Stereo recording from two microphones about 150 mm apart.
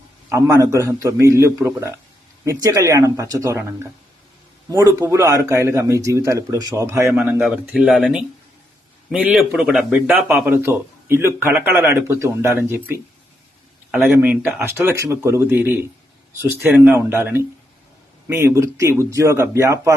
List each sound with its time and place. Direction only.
0.3 s a man's voice: 20° right (ahead or behind)
7.1 s a man's voice: 5° right (ahead or behind)